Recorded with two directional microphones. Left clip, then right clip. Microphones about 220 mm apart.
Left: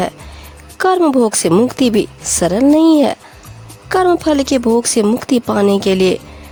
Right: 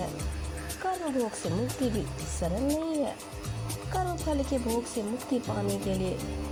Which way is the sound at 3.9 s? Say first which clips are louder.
Left 18 dB; 45° left (ahead or behind).